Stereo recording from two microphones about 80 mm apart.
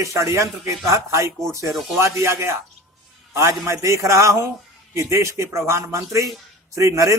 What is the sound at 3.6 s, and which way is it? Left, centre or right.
Speech, right.